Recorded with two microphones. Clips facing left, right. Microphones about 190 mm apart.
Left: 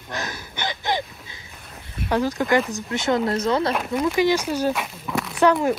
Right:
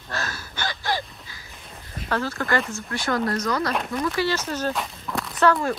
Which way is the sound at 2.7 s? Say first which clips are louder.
Left 4 dB; 20° left (ahead or behind).